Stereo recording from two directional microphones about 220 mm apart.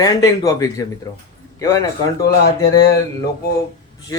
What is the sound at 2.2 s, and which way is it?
Speech, 15° left (ahead or behind).